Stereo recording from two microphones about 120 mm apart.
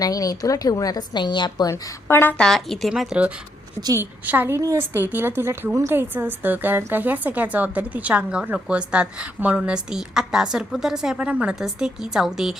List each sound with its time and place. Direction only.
0.0 s a woman's voice: 30° left (ahead or behind)
1.7 s a woman's voice: 20° left (ahead or behind)
2.4 s a woman's voice: 5° left (ahead or behind)
3.9 s a woman's voice: 20° right (ahead or behind)